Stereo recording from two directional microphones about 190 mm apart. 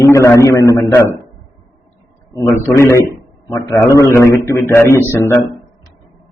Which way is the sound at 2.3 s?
15° left (ahead or behind).